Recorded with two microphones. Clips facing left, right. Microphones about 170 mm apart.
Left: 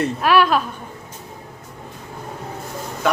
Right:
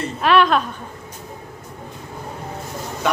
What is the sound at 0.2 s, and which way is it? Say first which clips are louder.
Speech: right 2 dB; 5° left (ahead or behind).